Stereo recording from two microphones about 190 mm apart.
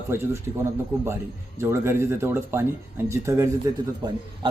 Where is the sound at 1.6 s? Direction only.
15° right (ahead or behind).